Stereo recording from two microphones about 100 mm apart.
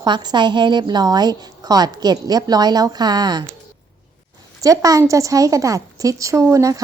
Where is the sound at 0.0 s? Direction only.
45° right (ahead or behind).